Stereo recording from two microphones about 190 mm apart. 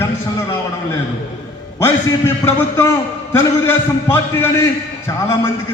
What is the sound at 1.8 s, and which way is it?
A man's voice, 10° left (ahead or behind).